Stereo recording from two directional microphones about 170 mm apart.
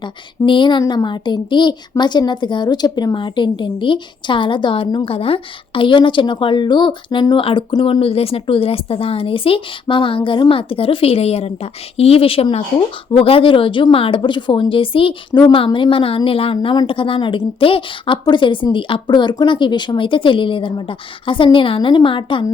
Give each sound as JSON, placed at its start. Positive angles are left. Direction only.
{"t": 0.4, "sound": "a woman's voice", "side_deg": 30}